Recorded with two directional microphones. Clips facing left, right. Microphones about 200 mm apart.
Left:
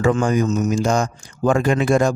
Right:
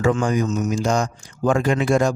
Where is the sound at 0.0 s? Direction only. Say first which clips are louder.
Left 2 dB; 50° left (ahead or behind).